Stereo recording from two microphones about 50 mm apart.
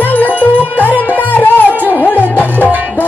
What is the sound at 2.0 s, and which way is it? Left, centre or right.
Music, left.